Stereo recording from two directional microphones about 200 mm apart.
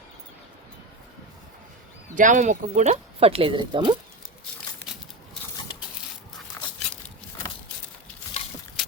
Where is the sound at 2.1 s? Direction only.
40° right (ahead or behind); by 3.9 s 25° right (ahead or behind).